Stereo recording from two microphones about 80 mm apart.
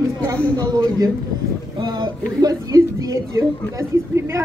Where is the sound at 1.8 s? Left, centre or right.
Right.